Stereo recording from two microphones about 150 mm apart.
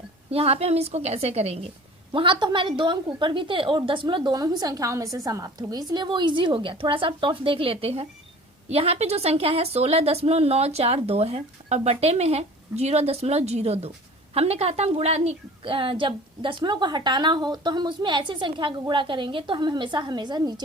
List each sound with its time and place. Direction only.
0.3 s a woman's voice: 45° right (ahead or behind)